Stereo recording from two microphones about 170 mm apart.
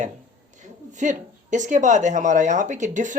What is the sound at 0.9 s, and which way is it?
Speech, 45° right (ahead or behind).